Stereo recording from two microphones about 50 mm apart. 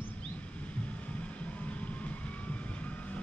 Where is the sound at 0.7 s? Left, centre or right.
Left.